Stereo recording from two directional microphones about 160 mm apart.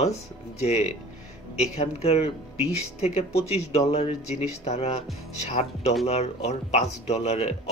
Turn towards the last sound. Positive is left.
turn(degrees=45)  # may be behind; listen again after turning